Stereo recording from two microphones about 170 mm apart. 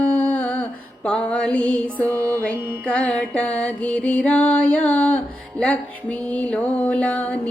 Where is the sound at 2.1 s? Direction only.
15° right (ahead or behind).